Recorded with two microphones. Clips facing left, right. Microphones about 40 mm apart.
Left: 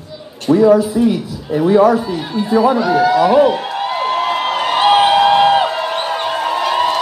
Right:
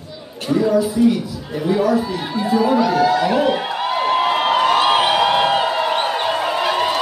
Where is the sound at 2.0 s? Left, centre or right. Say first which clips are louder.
Left 2 dB; centre.